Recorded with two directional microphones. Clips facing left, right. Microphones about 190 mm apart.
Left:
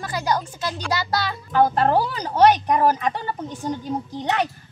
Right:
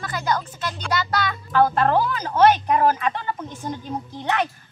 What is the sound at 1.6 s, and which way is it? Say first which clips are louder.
Speech: even; 15° left (ahead or behind).